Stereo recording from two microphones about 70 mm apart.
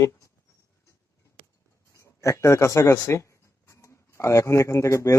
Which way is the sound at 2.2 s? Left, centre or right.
Left.